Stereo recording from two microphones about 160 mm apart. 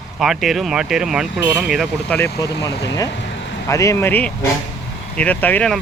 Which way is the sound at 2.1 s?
15° left (ahead or behind).